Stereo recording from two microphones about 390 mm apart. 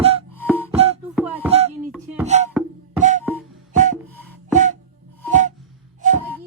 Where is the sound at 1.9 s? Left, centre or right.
Centre.